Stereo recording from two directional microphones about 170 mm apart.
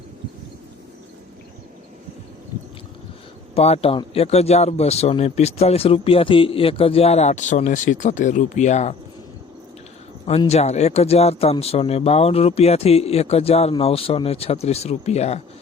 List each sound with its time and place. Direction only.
3.5 s speech: 35° left (ahead or behind)
10.2 s speech: 40° left (ahead or behind)